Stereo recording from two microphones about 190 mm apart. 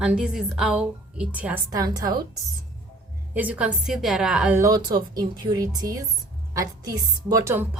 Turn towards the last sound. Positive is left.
turn(degrees=-15)  # may be behind; listen again after turning